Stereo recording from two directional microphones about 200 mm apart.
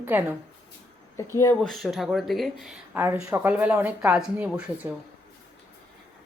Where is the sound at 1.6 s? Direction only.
Centre (ahead or behind).